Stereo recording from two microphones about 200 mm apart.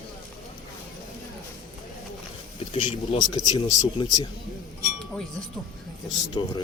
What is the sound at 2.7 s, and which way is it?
Speech, 25° left (ahead or behind).